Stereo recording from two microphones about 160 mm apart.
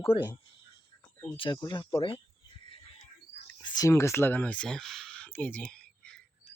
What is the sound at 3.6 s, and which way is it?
Speech, 25° left (ahead or behind).